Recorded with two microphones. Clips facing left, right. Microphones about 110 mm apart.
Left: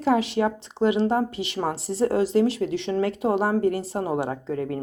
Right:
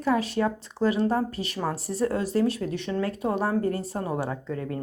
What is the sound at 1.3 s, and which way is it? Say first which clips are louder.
Speech: left 2 dB; 90° left.